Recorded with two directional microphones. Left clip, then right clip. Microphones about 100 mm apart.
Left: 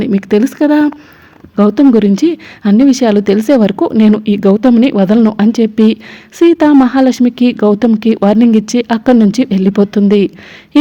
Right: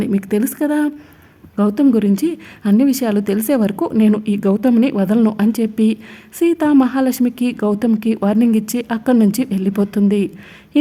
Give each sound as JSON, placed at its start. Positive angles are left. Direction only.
{"t": 0.0, "sound": "speech", "side_deg": 35}